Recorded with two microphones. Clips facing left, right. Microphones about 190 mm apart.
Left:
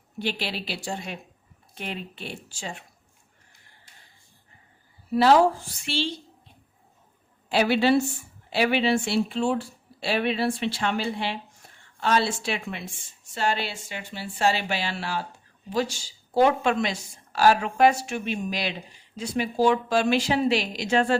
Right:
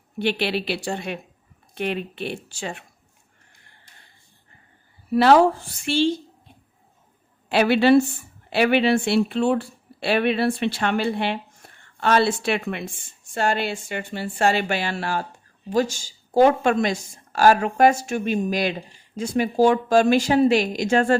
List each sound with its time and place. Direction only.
0.2 s speech: 65° right (ahead or behind)
5.1 s speech: 60° right (ahead or behind)
5.8 s speech: 50° right (ahead or behind)
7.5 s speech: 65° right (ahead or behind)
11.6 s a sound: 60° right (ahead or behind)
11.9 s speech: 60° right (ahead or behind)